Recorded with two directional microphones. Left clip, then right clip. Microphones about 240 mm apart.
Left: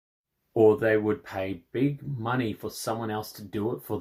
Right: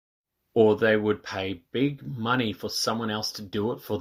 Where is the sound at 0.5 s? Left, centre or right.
Right.